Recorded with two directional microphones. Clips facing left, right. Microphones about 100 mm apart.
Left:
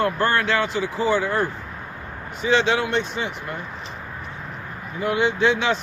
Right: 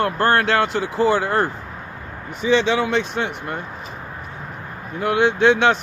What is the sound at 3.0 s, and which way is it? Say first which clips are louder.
Speech: right 3 dB; 65° right (ahead or behind).